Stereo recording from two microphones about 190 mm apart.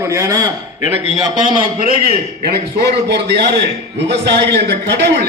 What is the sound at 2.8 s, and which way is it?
A man's voice, 60° right (ahead or behind).